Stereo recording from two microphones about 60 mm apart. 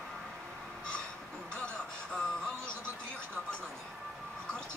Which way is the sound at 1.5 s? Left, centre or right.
Centre.